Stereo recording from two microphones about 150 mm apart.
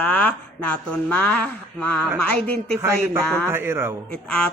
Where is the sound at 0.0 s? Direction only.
10° left (ahead or behind).